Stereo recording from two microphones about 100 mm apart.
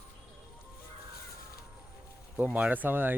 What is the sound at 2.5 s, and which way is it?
Speech, 20° right (ahead or behind).